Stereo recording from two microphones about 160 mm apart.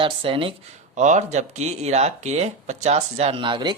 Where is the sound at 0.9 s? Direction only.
50° right (ahead or behind).